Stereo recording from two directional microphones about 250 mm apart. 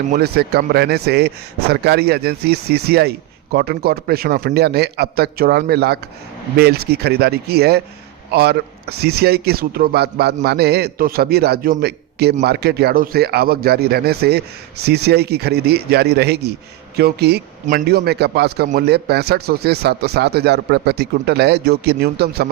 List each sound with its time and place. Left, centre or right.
0.1 s a man's voice: right